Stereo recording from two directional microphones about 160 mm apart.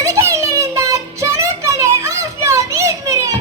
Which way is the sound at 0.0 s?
20° right (ahead or behind).